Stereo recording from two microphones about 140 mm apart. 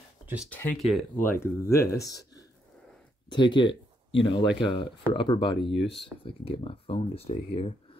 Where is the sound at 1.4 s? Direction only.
20° left (ahead or behind); by 8.0 s 45° left (ahead or behind).